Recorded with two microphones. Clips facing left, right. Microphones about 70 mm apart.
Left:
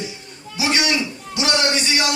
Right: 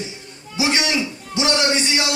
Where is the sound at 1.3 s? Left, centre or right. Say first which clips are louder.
Right 1 dB; right.